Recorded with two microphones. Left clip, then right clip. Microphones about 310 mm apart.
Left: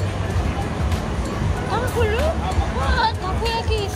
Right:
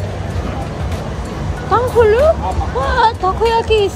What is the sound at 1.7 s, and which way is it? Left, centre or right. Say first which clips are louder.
Speech: right 12 dB; right.